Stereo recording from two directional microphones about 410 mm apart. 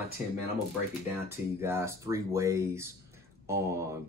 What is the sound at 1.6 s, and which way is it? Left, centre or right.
Speech, centre.